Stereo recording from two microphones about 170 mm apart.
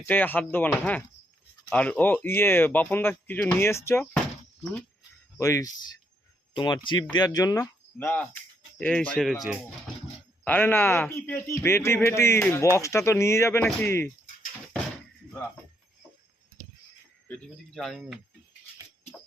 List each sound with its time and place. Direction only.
0.0 s speech: 10° left (ahead or behind)
5.4 s speech: 20° left (ahead or behind); by 9.6 s centre (ahead or behind)
10.4 s speech: 10° left (ahead or behind)
17.7 s speech: centre (ahead or behind)